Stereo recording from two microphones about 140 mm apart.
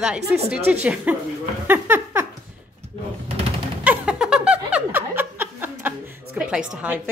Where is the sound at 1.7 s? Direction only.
15° right (ahead or behind).